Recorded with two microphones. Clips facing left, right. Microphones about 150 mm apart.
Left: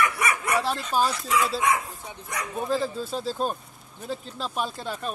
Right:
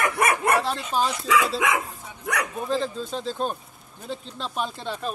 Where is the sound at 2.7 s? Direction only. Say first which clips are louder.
Even; 5° left (ahead or behind).